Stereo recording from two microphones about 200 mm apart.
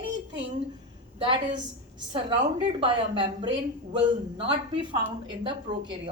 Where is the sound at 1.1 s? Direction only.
25° right (ahead or behind).